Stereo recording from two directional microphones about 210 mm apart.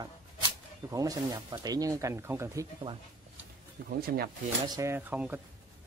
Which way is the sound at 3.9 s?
45° right (ahead or behind).